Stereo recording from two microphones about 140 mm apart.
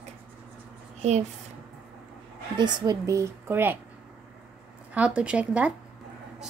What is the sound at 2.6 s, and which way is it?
A woman's voice, 25° right (ahead or behind).